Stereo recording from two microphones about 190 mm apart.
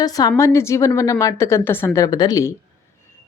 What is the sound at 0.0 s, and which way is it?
Speech, 20° left (ahead or behind).